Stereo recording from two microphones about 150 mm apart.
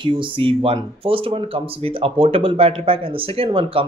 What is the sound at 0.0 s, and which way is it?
Speech, 35° right (ahead or behind).